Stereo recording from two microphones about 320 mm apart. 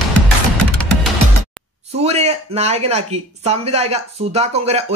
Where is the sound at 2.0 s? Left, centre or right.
Centre.